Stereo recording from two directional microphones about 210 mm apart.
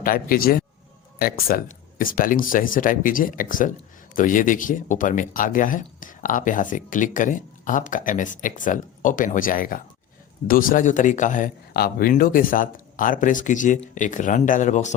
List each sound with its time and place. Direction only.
0.0 s a man's voice: 45° left (ahead or behind)